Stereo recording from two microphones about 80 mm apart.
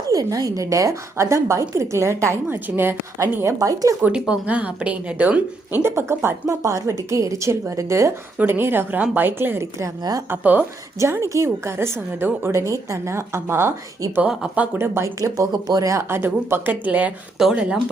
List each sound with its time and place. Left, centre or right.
0.1 s a woman's voice: right
3.6 s speech: right
4.1 s a woman's voice: centre
5.8 s a woman's voice: right
8.4 s a woman's voice: right
10.0 s speech: right
10.2 s a woman's voice: right
11.0 s a woman's voice: right
14.2 s a woman's voice: centre
14.8 s a woman's voice: right
15.2 s a woman's voice: right
17.3 s a woman's voice: centre